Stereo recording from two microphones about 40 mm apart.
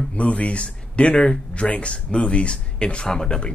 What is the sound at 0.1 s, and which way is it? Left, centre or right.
Speech, left.